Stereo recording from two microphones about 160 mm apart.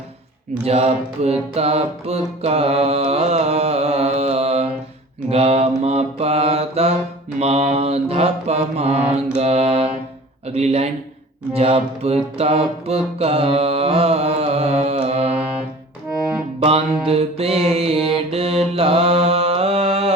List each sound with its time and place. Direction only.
0.6 s music: 40° right (ahead or behind)
11.5 s mantra: 40° right (ahead or behind)
16.6 s music: 35° right (ahead or behind)
18.0 s mantra: 35° right (ahead or behind)